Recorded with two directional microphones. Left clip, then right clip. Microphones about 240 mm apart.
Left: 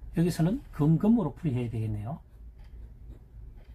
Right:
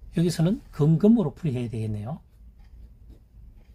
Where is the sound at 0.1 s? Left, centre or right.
Right.